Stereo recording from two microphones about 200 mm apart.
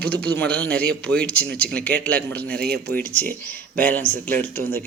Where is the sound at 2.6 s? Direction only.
55° right (ahead or behind).